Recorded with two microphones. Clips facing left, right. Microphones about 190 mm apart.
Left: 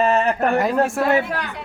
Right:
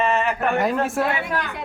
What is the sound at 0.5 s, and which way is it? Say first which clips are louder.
Speech: left 2 dB; centre (ahead or behind).